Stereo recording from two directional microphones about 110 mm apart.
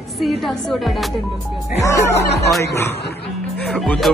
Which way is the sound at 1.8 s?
25° left (ahead or behind).